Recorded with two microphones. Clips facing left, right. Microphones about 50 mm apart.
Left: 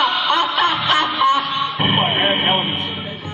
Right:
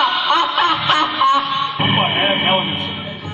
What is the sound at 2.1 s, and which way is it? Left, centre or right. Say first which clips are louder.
Vehicle: right 1 dB; centre.